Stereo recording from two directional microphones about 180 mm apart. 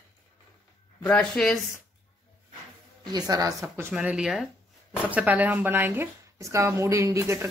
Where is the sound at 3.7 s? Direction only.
10° right (ahead or behind).